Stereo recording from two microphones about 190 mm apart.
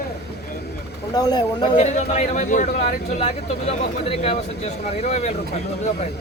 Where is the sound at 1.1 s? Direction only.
20° left (ahead or behind).